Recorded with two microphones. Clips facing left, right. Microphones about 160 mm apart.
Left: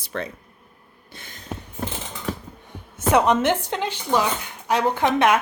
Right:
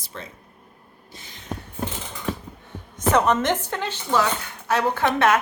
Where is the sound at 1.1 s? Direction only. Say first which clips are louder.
Left 2 dB; 55° left (ahead or behind).